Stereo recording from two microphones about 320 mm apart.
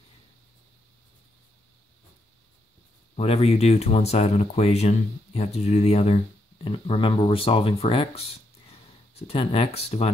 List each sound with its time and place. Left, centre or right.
3.2 s speech: centre